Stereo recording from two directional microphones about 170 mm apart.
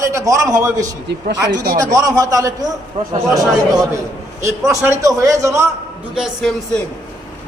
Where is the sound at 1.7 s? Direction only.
20° right (ahead or behind).